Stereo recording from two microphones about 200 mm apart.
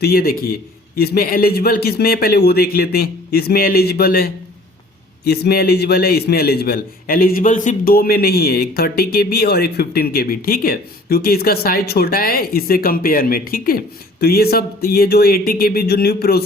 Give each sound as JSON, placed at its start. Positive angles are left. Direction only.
{"t": 0.0, "sound": "a man's voice", "side_deg": 50}